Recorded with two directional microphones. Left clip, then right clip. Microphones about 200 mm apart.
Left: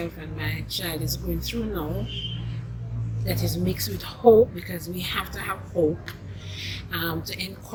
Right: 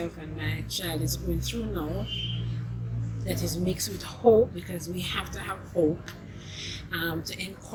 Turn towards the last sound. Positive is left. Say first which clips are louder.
# left 2 dB
turn(degrees=5)  # may be behind; listen again after turning